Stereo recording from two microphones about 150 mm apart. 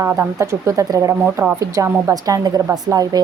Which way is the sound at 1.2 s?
10° right (ahead or behind).